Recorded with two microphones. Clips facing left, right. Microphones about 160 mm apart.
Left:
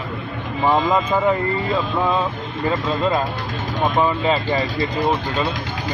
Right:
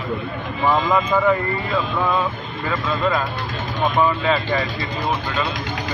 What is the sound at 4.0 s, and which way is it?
Speech, 25° left (ahead or behind).